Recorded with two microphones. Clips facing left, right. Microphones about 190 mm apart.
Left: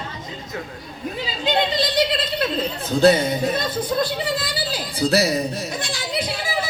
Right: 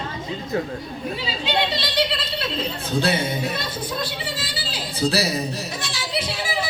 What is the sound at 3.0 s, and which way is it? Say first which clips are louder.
Speech: left 9 dB; 50° left (ahead or behind).